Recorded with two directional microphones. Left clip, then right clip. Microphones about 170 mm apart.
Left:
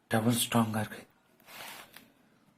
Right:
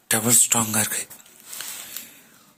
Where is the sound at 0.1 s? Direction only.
15° right (ahead or behind).